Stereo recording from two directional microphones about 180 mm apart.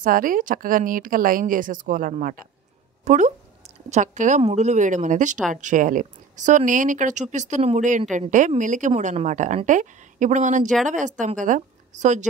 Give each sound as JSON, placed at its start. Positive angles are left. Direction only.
{"t": 0.0, "sound": "a woman's voice", "side_deg": -50}